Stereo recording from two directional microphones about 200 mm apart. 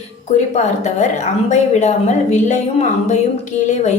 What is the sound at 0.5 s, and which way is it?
A woman's voice, 35° left (ahead or behind).